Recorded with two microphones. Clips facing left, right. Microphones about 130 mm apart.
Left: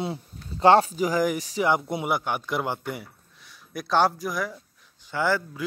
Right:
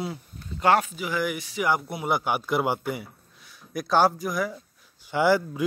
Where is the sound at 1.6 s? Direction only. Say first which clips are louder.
Left 2 dB; 25° left (ahead or behind).